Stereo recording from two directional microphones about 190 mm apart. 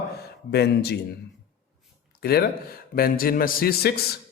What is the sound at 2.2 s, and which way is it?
Speech, 55° left (ahead or behind).